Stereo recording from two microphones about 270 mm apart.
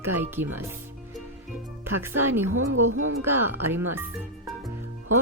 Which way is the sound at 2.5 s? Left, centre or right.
Right.